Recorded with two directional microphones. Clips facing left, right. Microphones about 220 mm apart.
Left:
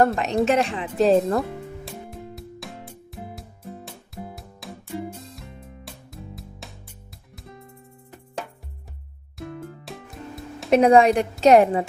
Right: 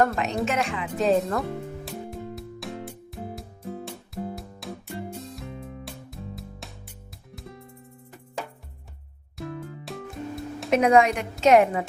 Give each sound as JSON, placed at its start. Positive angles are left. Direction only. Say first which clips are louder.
{"t": 0.0, "sound": "a woman's voice", "louder": "left 4 dB", "side_deg": 35}
{"t": 1.4, "sound": "music", "louder": "left 2 dB", "side_deg": 0}
{"t": 9.4, "sound": "music", "louder": "even", "side_deg": 0}
{"t": 10.7, "sound": "a woman's voice", "louder": "left 4 dB", "side_deg": 30}